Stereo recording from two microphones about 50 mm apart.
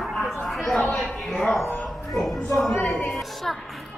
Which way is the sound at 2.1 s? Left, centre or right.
Centre.